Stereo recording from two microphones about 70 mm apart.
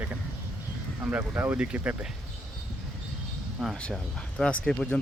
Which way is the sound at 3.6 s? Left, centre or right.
Centre.